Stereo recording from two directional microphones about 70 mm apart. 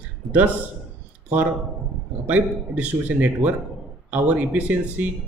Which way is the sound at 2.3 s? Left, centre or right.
Right.